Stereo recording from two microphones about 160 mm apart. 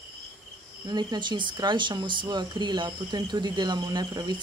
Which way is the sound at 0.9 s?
25° right (ahead or behind).